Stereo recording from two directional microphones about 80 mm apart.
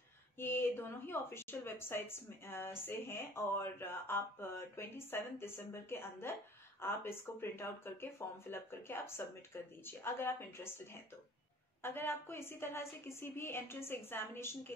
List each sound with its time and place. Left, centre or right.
0.4 s a woman's voice: left
11.8 s a woman's voice: left